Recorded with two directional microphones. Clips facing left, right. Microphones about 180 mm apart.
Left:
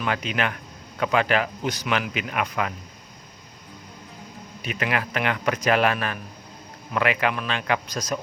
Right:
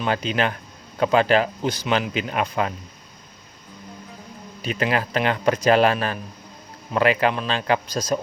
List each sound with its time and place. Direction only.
0.0 s speech: 30° right (ahead or behind)
4.6 s speech: 30° right (ahead or behind)